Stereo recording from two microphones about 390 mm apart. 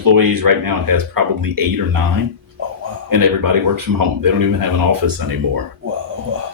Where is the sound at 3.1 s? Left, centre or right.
Right.